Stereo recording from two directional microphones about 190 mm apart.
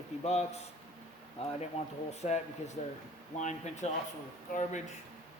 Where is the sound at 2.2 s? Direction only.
35° left (ahead or behind).